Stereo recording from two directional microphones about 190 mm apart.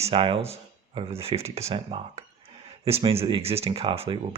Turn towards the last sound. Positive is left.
turn(degrees=-30)  # may be behind; listen again after turning